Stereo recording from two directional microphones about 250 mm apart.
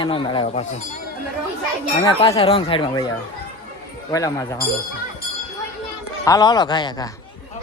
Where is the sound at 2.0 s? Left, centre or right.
Left.